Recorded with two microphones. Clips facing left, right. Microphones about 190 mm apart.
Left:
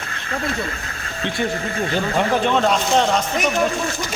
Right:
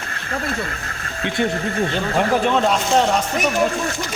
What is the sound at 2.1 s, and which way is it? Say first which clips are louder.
Speech: right 1 dB; centre (ahead or behind).